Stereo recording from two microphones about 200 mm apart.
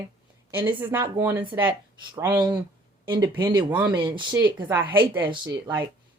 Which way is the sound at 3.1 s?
20° right (ahead or behind).